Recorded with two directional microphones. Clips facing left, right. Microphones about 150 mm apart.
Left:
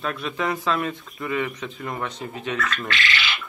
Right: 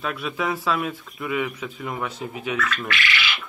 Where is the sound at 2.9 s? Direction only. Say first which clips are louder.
Even; 25° left (ahead or behind).